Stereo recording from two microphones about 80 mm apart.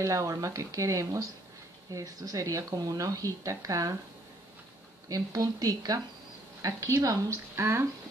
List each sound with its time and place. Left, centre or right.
0.0 s speech: right
5.0 s speech: right
7.5 s speech: right